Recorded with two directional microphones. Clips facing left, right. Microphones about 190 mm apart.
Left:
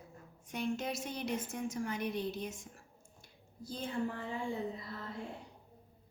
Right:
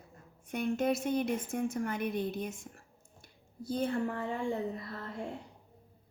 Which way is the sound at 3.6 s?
60° right (ahead or behind).